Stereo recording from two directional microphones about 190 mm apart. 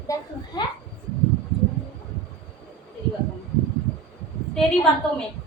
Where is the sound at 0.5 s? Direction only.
20° left (ahead or behind).